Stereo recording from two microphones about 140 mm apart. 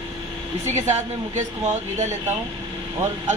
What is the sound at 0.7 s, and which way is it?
Music, 55° right (ahead or behind).